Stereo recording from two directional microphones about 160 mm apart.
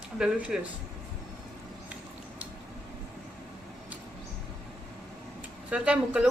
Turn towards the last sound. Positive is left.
turn(degrees=-5)  # may be behind; listen again after turning